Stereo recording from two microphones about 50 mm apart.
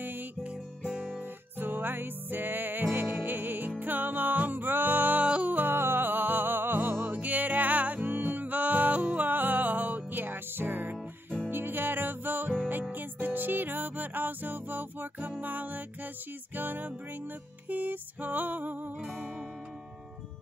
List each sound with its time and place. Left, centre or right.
0.0 s music: right
0.9 s guitar: centre
1.6 s music: right
5.2 s music: right
5.8 s music: right